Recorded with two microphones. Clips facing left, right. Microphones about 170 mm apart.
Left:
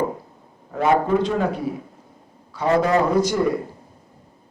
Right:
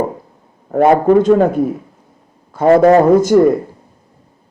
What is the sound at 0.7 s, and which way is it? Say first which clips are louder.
A man's voice: right 9 dB; 50° right (ahead or behind).